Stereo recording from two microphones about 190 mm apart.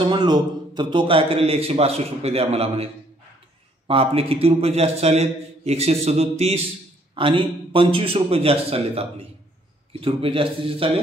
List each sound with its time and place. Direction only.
0.0 s a man's voice: 25° right (ahead or behind)